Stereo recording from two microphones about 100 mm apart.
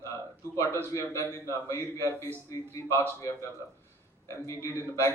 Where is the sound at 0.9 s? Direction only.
30° left (ahead or behind).